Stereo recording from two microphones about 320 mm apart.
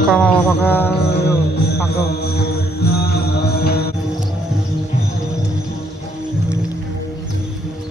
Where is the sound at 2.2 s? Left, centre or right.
Left.